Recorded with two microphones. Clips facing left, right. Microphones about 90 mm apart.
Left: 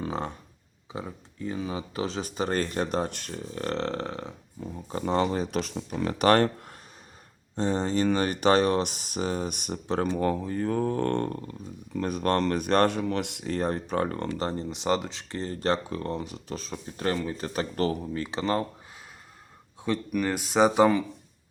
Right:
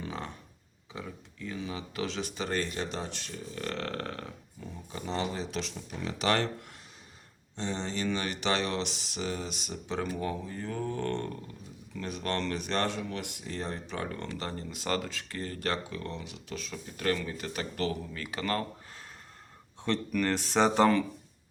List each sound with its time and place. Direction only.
0.0 s a sound: 35° left (ahead or behind)
0.9 s speech: 35° left (ahead or behind)
4.6 s speech: 45° left (ahead or behind); by 18.6 s 25° left (ahead or behind)
19.8 s speech: 10° left (ahead or behind)